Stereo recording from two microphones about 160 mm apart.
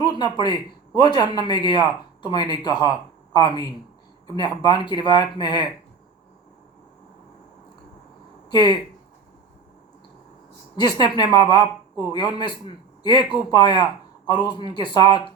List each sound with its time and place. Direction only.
0.0 s a man's voice: 25° left (ahead or behind)
8.4 s a man's voice: 25° left (ahead or behind)
10.8 s a man's voice: 25° left (ahead or behind)